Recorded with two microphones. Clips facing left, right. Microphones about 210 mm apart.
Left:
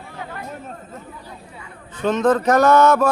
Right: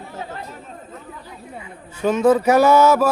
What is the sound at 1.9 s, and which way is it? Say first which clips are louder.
Speech: right 2 dB; 10° right (ahead or behind).